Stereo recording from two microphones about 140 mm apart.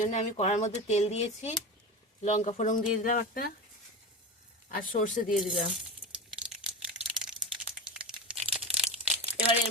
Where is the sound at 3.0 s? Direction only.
75° left (ahead or behind).